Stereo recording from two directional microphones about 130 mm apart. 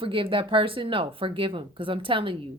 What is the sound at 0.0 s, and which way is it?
Speech, 40° right (ahead or behind).